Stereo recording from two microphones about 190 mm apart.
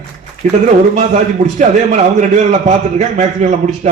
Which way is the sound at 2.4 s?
35° right (ahead or behind).